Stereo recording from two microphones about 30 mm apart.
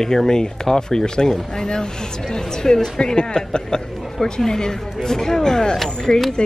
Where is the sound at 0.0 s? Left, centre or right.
Centre.